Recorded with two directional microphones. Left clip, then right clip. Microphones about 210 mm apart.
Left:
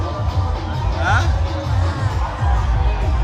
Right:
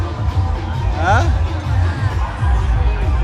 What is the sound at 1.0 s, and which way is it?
Music, 5° left (ahead or behind).